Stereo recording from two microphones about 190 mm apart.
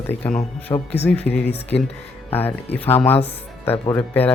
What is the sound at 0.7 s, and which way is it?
Speech, 20° left (ahead or behind).